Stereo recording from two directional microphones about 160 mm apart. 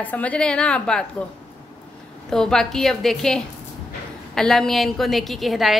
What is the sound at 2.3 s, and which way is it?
A woman's voice, 5° left (ahead or behind).